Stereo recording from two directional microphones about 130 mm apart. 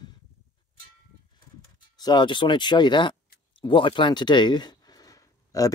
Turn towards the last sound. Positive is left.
turn(degrees=25)  # may be behind; listen again after turning